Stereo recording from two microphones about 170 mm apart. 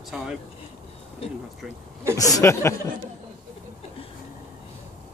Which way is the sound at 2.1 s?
20° left (ahead or behind).